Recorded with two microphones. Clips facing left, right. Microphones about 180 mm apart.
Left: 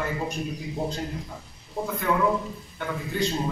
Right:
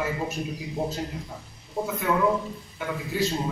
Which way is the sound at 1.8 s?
Centre (ahead or behind).